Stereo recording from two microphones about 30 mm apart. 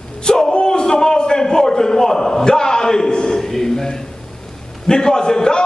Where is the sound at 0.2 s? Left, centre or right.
Left.